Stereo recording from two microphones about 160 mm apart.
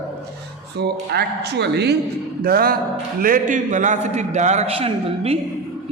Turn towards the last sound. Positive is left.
turn(degrees=-40)  # may be behind; listen again after turning